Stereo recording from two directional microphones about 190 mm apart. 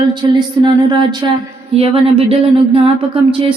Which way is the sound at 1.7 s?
30° right (ahead or behind).